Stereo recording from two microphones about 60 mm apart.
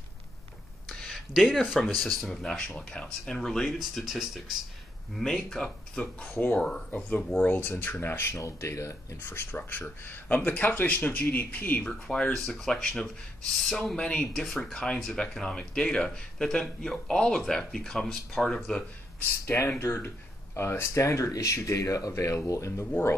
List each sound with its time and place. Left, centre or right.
0.8 s a sound: centre
1.4 s speech: centre
2.4 s speech: centre
6.0 s speech: left
6.6 s speech: centre
7.0 s speech: left
8.4 s speech: left
9.2 s speech: left
11.8 s speech: centre
13.9 s speech: centre
14.2 s speech: centre
15.0 s speech: centre
19.1 s speech: left